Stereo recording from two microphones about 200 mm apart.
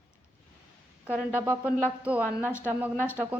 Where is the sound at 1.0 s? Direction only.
10° right (ahead or behind).